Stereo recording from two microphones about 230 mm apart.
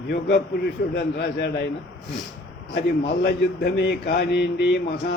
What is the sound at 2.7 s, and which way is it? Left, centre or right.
A man's voice, left.